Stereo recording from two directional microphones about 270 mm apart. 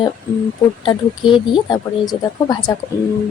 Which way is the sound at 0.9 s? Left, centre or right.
Centre.